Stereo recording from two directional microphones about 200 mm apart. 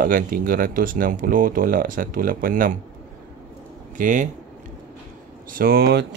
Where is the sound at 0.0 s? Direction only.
45° right (ahead or behind).